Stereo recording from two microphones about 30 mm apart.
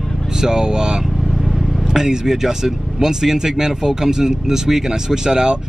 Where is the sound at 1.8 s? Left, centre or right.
Centre.